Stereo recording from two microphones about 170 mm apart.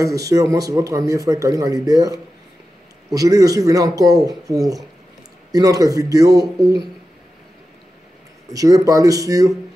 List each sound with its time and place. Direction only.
0.0 s a man's voice: 20° right (ahead or behind)
8.5 s a man's voice: 20° right (ahead or behind)